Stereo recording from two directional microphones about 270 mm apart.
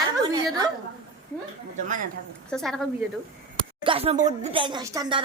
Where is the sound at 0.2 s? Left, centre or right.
Centre.